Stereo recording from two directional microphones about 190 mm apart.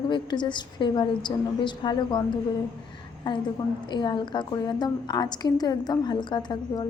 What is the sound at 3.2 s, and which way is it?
A woman's voice, 25° left (ahead or behind).